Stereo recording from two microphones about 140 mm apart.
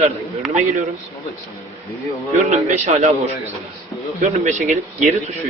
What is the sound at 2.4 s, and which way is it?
A man's voice, 55° right (ahead or behind).